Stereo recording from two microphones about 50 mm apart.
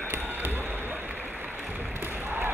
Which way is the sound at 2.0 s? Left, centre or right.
Right.